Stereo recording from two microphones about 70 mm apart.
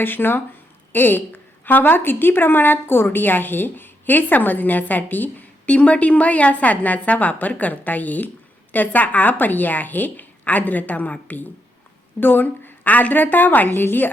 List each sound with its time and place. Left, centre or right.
0.0 s a woman's voice: left